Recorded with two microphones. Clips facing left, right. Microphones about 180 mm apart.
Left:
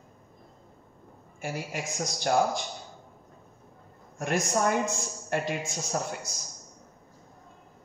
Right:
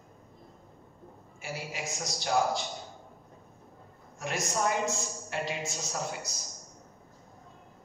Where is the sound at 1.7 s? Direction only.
50° left (ahead or behind).